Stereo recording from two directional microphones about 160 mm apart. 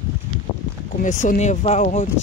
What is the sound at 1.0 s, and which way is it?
Speech, 50° left (ahead or behind).